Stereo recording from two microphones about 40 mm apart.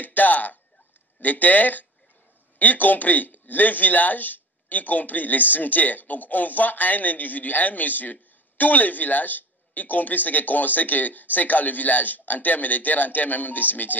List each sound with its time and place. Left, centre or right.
0.0 s speech: left